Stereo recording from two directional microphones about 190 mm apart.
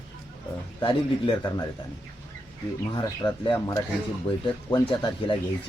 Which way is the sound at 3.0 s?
25° left (ahead or behind).